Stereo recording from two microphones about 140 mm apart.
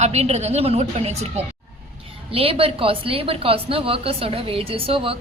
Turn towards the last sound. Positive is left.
turn(degrees=-40)  # may be behind; listen again after turning